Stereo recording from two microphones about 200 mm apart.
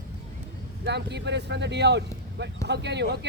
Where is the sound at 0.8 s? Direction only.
60° right (ahead or behind).